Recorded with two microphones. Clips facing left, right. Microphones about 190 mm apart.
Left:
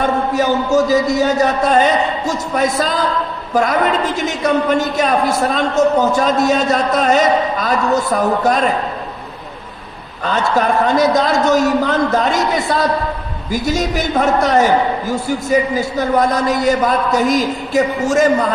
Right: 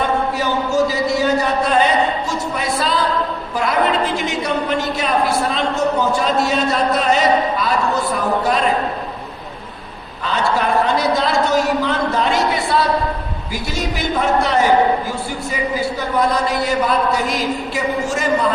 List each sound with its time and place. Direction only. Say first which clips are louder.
0.0 s a man's voice: left 3 dB; 45° left (ahead or behind)
10.2 s a man's voice: left 3 dB; 45° left (ahead or behind)